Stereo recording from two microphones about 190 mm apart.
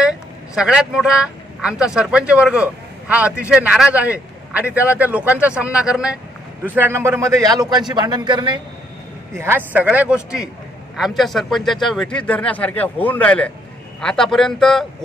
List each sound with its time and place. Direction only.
0.6 s a man's voice: 5° right (ahead or behind)